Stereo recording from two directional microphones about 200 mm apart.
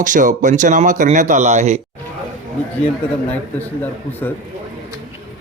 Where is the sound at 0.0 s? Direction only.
40° right (ahead or behind).